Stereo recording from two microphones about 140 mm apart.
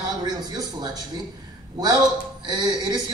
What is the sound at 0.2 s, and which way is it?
Speech, 30° right (ahead or behind).